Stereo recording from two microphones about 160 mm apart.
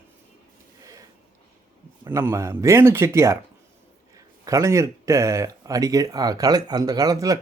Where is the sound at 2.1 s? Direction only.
15° right (ahead or behind).